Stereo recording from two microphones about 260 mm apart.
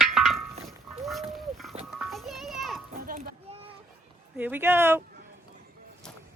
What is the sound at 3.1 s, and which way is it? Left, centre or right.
Children playing, right.